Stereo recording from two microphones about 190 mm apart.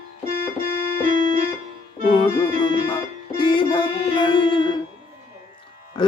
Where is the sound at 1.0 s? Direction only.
45° right (ahead or behind).